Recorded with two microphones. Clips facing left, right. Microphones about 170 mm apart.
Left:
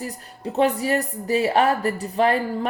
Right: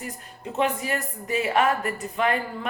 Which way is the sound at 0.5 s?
35° left (ahead or behind).